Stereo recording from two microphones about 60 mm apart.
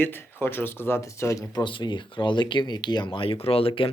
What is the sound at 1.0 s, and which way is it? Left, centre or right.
Speech, left.